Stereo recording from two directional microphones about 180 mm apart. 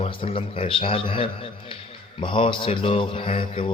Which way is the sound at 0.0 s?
30° left (ahead or behind).